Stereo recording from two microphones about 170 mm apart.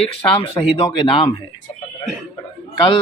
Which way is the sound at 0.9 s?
30° left (ahead or behind).